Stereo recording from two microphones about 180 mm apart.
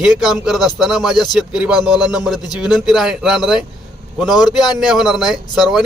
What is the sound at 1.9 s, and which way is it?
Speech, 20° left (ahead or behind).